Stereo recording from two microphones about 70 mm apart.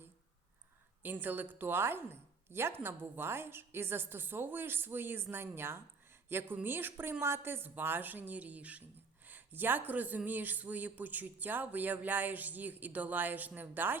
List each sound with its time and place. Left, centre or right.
1.0 s a woman's voice: right